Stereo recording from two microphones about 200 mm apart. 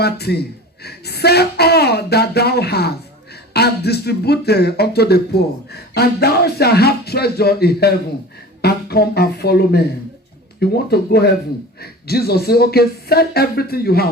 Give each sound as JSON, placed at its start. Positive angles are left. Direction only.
{"t": 0.0, "sound": "speech", "side_deg": 55}